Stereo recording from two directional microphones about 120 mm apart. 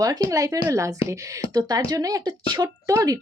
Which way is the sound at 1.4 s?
50° left (ahead or behind).